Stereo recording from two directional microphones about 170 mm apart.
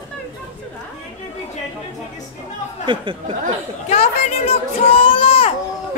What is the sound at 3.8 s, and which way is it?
Speech, 40° left (ahead or behind).